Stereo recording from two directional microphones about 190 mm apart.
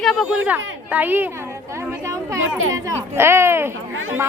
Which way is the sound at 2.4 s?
90° right.